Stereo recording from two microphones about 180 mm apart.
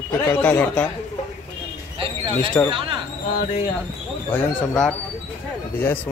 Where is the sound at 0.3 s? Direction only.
10° left (ahead or behind).